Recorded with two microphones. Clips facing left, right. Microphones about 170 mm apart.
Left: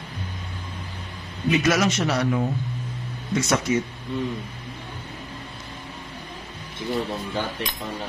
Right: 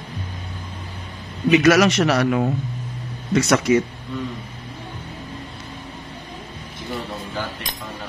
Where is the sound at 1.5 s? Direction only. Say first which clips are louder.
Right 7 dB; 75° right (ahead or behind).